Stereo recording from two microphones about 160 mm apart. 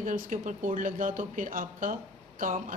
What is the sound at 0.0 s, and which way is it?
Speech, 55° right (ahead or behind).